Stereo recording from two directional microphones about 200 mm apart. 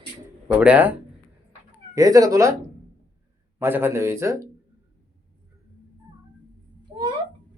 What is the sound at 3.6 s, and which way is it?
Speech, 10° right (ahead or behind).